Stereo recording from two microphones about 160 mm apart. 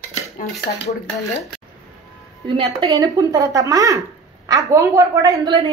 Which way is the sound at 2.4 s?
30° right (ahead or behind).